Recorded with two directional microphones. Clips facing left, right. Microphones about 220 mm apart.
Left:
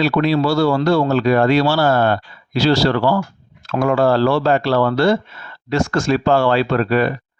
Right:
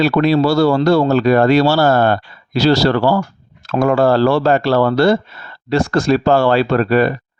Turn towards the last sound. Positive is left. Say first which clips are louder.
# right 3 dB
turn(degrees=-40)  # may be behind; listen again after turning